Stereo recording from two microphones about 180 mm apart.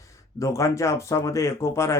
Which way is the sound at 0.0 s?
15° left (ahead or behind).